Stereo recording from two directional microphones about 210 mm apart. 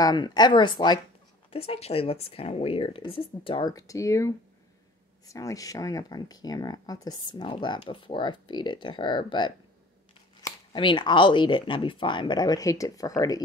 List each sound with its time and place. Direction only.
0.0 s speech: 20° left (ahead or behind)